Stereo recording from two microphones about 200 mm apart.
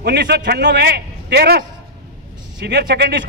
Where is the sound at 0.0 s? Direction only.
55° right (ahead or behind).